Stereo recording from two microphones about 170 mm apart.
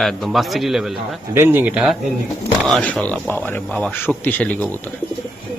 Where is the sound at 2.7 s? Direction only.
5° left (ahead or behind).